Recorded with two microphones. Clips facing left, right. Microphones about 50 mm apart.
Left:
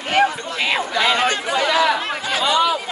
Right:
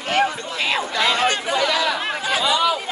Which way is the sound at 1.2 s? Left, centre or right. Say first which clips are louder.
Left 1 dB; left.